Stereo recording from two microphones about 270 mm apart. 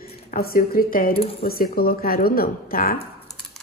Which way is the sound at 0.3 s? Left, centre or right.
Left.